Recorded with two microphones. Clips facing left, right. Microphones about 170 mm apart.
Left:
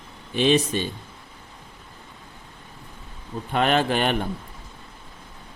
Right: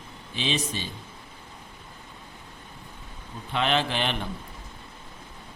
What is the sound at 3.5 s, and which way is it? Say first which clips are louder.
Speech: left 5 dB; 50° left (ahead or behind).